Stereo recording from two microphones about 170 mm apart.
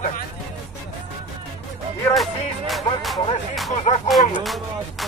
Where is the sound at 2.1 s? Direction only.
Centre (ahead or behind).